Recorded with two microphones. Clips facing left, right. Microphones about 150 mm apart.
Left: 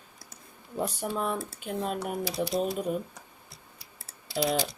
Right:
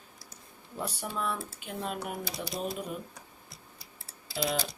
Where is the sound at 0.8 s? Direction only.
45° left (ahead or behind).